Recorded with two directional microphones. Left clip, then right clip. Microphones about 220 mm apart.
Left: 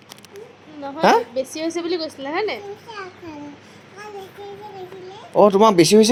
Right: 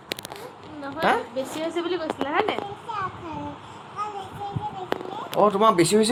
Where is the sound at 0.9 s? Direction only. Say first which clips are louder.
Left 7 dB; 50° left (ahead or behind).